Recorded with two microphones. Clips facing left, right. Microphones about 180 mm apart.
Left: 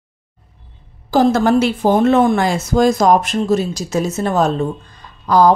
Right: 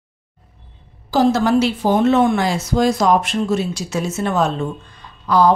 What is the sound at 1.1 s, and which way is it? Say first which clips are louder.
A woman's voice: left 2 dB; 50° left (ahead or behind).